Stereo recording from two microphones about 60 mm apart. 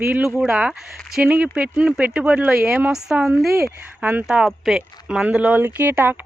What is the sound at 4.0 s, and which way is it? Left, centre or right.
Speech, right.